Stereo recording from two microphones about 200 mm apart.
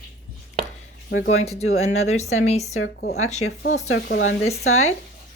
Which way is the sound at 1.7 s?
30° left (ahead or behind).